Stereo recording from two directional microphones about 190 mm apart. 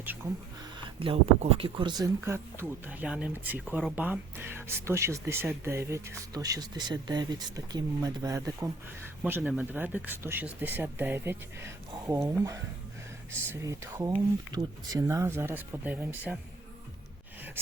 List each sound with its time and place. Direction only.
0.9 s speech: 30° right (ahead or behind); by 12.2 s 10° right (ahead or behind)
13.5 s speech: 15° right (ahead or behind)